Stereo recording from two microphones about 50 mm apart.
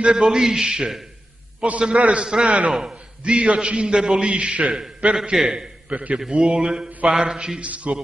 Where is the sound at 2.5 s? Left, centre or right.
Right.